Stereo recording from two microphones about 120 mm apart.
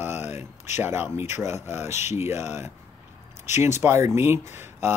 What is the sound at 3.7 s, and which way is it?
Speech, 20° right (ahead or behind).